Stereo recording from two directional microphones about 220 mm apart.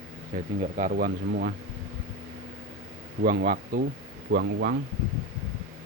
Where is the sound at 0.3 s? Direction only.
35° right (ahead or behind).